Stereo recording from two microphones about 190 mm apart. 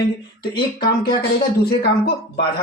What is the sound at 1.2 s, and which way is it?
Speech, 55° left (ahead or behind).